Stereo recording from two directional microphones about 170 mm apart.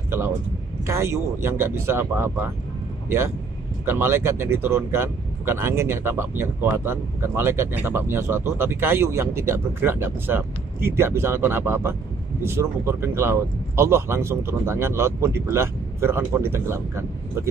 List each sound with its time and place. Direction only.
0.8 s speech: 15° right (ahead or behind)
3.8 s speech: 15° right (ahead or behind)